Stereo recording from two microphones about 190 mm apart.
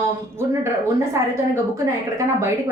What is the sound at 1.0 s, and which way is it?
A woman's voice, 15° right (ahead or behind).